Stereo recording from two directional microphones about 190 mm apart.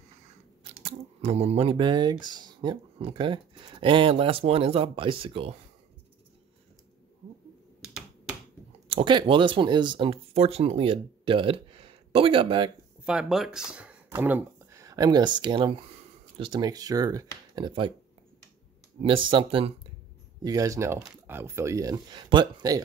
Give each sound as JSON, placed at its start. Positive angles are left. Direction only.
{"t": 0.8, "sound": "speech", "side_deg": -30}
{"t": 8.8, "sound": "speech", "side_deg": -25}
{"t": 13.0, "sound": "speech", "side_deg": -5}
{"t": 19.0, "sound": "speech", "side_deg": -25}